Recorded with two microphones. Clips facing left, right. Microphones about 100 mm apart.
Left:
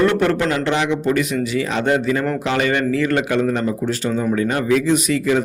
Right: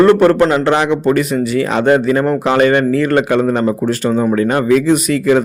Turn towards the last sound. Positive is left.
turn(degrees=-55)  # may be behind; listen again after turning